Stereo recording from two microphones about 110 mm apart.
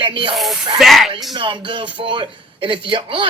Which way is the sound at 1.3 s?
50° right (ahead or behind).